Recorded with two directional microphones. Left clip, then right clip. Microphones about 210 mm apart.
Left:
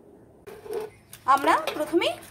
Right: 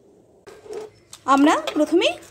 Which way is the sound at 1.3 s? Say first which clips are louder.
Right 3 dB; 40° right (ahead or behind).